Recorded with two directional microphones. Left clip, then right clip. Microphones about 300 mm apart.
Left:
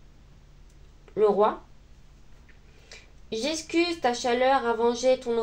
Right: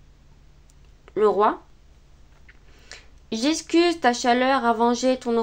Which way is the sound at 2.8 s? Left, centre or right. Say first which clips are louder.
Right 6 dB; right.